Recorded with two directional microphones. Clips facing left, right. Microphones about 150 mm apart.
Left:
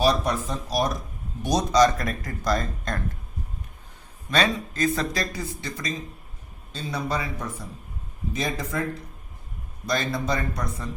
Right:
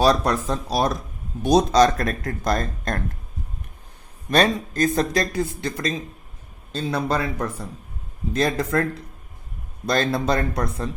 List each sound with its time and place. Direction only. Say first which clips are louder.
0.0 s speech: right 4 dB; 80° right
1.5 s speech: right 4 dB; 55° right (ahead or behind)
4.3 s speech: right 5 dB; 45° right (ahead or behind); by 8.9 s 70° right (ahead or behind)
9.8 s speech: right 5 dB; 60° right (ahead or behind)